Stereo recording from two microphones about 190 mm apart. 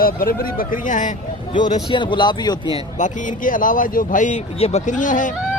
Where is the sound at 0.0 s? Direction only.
50° left (ahead or behind).